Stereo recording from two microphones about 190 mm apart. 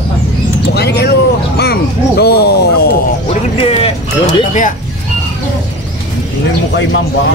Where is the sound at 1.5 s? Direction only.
55° left (ahead or behind).